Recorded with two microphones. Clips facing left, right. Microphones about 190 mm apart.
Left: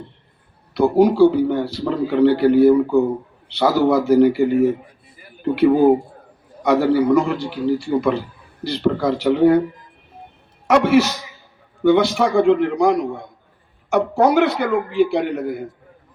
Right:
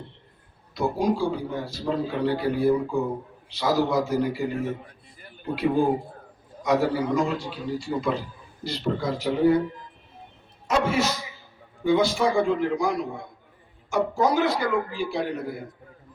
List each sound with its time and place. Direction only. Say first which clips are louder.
0.7 s a man's voice: left 9 dB; 70° left (ahead or behind)
10.7 s a man's voice: left 9 dB; 70° left (ahead or behind)